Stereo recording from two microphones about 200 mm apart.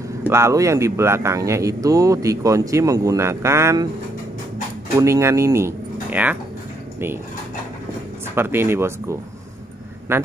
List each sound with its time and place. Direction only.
0.3 s speech: 15° right (ahead or behind)
4.9 s speech: 15° right (ahead or behind)
8.4 s speech: 10° right (ahead or behind)